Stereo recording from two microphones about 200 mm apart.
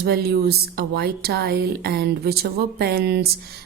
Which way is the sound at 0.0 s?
55° right (ahead or behind).